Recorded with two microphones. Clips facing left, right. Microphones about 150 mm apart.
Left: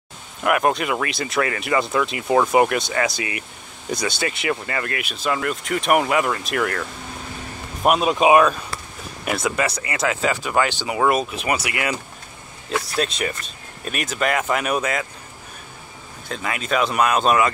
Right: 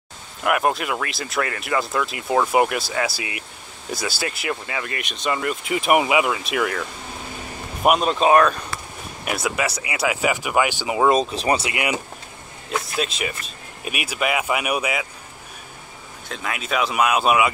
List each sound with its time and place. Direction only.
0.4 s speech: centre (ahead or behind)
8.1 s speech: 10° left (ahead or behind)
9.2 s speech: 5° right (ahead or behind)
11.1 s speech: 30° right (ahead or behind)
12.7 s speech: centre (ahead or behind)
16.3 s speech: centre (ahead or behind)